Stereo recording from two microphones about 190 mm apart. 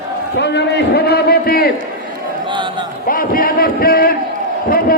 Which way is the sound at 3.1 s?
50° left (ahead or behind).